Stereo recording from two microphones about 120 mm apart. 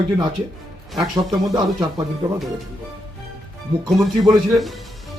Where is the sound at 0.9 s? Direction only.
35° right (ahead or behind).